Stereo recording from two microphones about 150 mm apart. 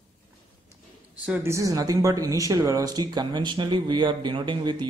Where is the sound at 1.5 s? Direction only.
20° right (ahead or behind).